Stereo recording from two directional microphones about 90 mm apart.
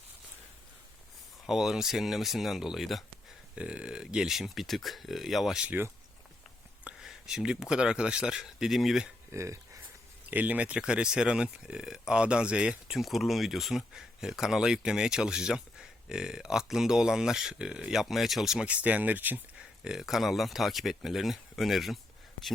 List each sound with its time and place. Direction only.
1.5 s speech: 5° right (ahead or behind)
5.6 s speech: 20° right (ahead or behind)
7.0 s speech: 5° right (ahead or behind)
9.3 s speech: 35° right (ahead or behind)
10.2 s speech: 15° right (ahead or behind); by 21.9 s centre (ahead or behind)